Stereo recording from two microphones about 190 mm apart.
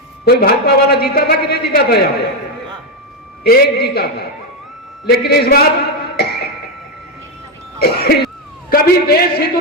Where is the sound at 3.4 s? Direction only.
55° left (ahead or behind).